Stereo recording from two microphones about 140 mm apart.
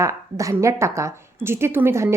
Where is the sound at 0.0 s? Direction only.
20° right (ahead or behind).